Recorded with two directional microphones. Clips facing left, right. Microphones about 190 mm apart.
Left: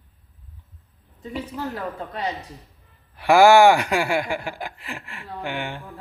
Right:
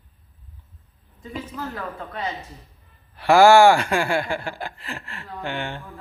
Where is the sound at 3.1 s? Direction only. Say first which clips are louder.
Even; 15° left (ahead or behind).